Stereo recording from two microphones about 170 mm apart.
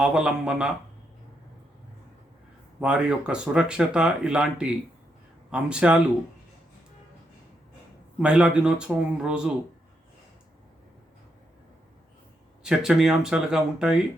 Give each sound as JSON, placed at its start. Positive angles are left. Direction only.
{"t": 0.0, "sound": "speech", "side_deg": -5}
{"t": 2.8, "sound": "speech", "side_deg": -5}
{"t": 8.2, "sound": "speech", "side_deg": -5}
{"t": 12.6, "sound": "speech", "side_deg": -5}